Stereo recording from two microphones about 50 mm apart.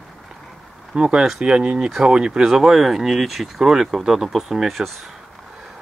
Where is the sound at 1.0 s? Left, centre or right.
Centre.